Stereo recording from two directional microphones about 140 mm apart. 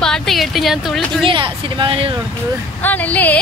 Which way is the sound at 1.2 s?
35° right (ahead or behind).